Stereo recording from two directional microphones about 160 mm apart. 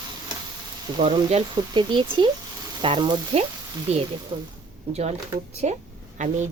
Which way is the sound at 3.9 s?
45° right (ahead or behind).